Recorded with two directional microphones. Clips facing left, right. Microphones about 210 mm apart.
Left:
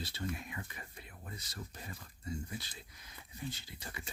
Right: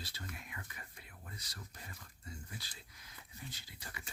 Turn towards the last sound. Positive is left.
turn(degrees=25)  # may be behind; listen again after turning